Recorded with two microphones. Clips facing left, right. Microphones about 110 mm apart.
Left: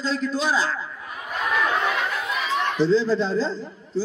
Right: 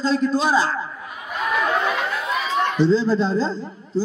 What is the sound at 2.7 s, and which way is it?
Speech, 40° right (ahead or behind).